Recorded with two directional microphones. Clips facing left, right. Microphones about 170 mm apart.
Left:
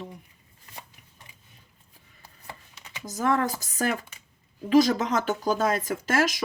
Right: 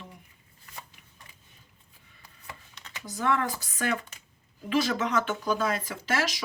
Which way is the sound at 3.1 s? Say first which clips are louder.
Left 3 dB; 40° left (ahead or behind).